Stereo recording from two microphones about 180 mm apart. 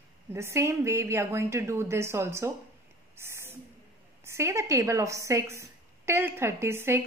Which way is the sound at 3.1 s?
15° right (ahead or behind).